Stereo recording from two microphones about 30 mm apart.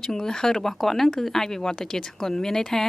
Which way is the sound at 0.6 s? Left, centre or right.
Centre.